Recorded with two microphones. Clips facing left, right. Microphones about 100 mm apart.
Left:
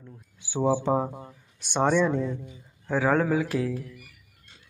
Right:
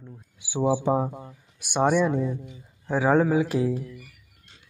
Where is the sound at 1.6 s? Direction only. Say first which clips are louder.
Right 1 dB; 10° right (ahead or behind).